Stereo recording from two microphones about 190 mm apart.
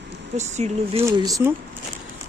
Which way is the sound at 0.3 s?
35° right (ahead or behind).